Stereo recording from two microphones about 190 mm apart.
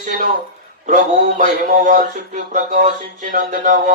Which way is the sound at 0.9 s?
40° right (ahead or behind).